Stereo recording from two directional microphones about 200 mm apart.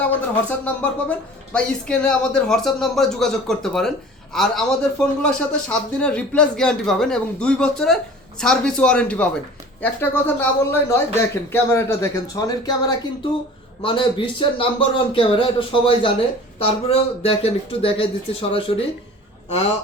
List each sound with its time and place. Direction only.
0.0 s speech: 5° left (ahead or behind); by 18.9 s 25° left (ahead or behind)